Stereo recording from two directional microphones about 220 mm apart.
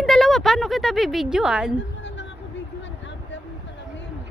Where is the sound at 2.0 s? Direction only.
55° left (ahead or behind).